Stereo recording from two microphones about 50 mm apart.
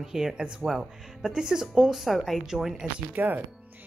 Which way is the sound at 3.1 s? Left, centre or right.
Right.